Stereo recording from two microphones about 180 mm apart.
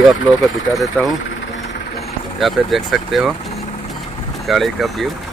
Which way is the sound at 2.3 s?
Centre (ahead or behind).